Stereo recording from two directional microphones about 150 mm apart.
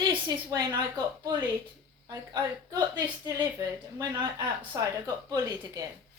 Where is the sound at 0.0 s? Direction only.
30° right (ahead or behind).